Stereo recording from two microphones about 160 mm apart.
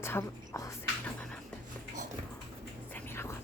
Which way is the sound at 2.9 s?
15° left (ahead or behind).